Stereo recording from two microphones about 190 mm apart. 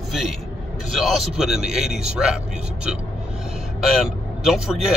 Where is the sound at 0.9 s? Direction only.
Centre (ahead or behind).